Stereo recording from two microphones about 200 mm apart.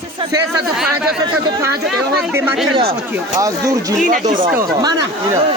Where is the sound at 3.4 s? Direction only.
15° right (ahead or behind).